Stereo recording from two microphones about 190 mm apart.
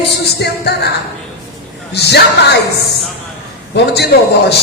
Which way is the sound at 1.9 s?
60° left (ahead or behind).